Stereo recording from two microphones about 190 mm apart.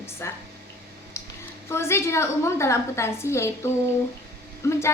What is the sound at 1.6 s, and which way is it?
A woman's voice, 15° left (ahead or behind).